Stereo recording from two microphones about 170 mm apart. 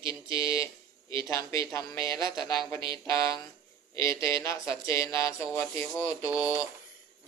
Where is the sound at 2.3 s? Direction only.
Centre (ahead or behind).